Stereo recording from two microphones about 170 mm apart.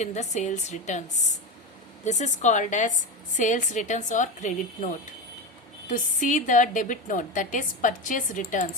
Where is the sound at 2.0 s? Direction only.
45° left (ahead or behind).